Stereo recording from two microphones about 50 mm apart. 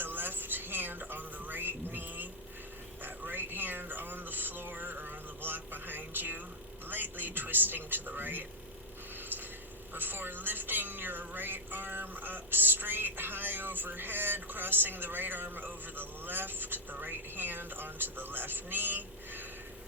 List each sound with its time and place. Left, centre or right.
0.0 s music: right
3.0 s a sound: right
6.8 s a man's voice: right
9.9 s a man's voice: right